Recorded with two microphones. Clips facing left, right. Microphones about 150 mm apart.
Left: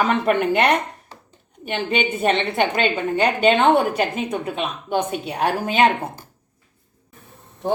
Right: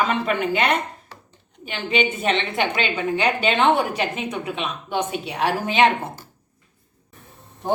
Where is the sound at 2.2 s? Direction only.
40° left (ahead or behind).